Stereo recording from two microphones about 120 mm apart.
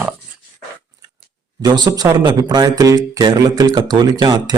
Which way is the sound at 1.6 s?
35° right (ahead or behind).